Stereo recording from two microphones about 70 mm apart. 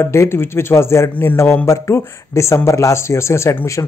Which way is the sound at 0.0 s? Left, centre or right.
Left.